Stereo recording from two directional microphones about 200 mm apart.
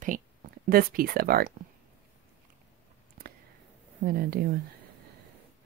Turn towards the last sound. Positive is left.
turn(degrees=-50)  # may be behind; listen again after turning